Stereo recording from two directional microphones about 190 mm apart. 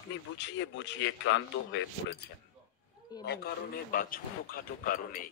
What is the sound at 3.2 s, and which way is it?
A man's voice, 55° left (ahead or behind).